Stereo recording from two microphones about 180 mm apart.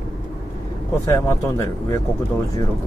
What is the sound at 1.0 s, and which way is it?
Speech, 15° left (ahead or behind).